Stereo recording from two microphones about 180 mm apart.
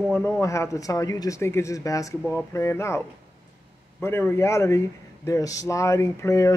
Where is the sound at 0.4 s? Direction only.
15° left (ahead or behind).